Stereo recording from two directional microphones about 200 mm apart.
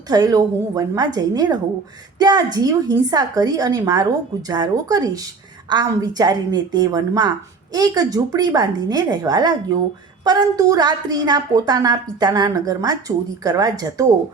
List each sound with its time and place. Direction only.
0.1 s a woman's voice: 20° right (ahead or behind)